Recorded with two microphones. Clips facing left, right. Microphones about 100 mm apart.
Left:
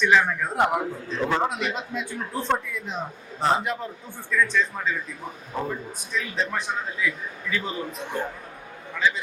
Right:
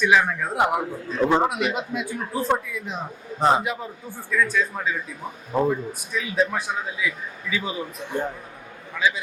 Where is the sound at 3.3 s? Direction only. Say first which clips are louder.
Right 3 dB; 15° right (ahead or behind).